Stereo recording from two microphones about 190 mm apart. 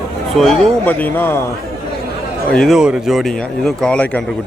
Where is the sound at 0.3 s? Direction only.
Centre (ahead or behind).